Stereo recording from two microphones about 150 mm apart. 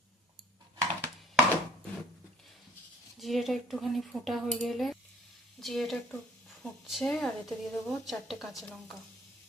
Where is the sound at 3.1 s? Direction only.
Centre (ahead or behind).